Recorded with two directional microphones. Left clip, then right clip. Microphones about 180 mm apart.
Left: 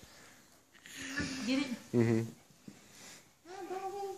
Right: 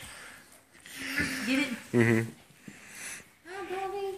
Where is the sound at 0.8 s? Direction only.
50° left (ahead or behind).